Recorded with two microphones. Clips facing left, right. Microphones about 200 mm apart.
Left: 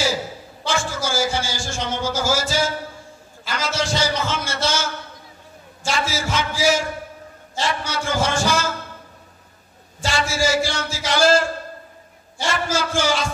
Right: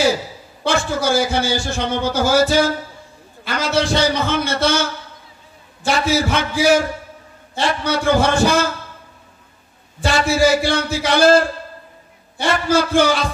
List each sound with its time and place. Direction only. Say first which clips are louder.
0.7 s a man's voice: right 6 dB; 60° right (ahead or behind)
5.9 s a man's voice: right 6 dB; 60° right (ahead or behind)
9.9 s a man's voice: right 6 dB; 60° right (ahead or behind)